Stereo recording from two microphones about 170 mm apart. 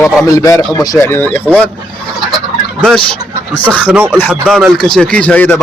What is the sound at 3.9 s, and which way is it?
Speech, 10° right (ahead or behind).